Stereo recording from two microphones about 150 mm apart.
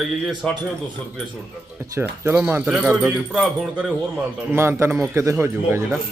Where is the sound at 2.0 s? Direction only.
15° right (ahead or behind).